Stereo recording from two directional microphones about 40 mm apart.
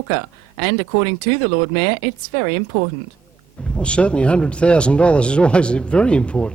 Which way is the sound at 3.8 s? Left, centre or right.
Left.